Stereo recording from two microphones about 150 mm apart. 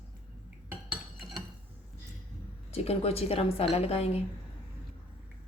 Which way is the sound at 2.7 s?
45° left (ahead or behind).